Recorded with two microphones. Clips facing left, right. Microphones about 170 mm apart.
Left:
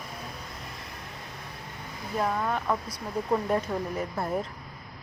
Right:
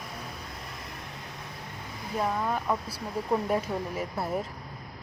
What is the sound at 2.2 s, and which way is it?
Speech, 5° right (ahead or behind).